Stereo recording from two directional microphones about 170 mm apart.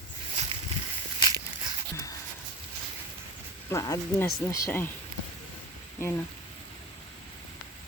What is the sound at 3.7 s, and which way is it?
Speech, 20° left (ahead or behind).